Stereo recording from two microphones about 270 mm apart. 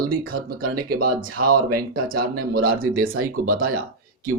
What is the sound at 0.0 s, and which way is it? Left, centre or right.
Speech, right.